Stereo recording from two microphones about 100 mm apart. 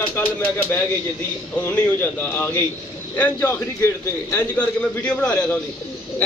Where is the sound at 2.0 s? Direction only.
20° left (ahead or behind).